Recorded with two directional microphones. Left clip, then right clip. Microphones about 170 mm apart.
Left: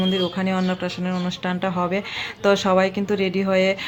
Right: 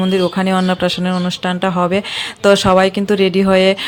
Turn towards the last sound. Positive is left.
turn(degrees=-30)  # may be behind; listen again after turning